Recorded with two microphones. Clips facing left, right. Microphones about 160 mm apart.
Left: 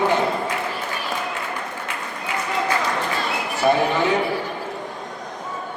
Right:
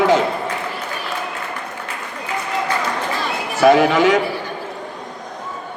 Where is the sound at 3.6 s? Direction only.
90° right.